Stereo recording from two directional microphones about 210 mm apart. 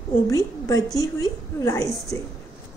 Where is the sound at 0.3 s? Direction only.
15° left (ahead or behind).